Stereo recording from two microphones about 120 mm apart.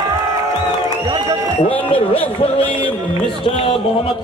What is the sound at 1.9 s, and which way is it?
Speech, 50° left (ahead or behind).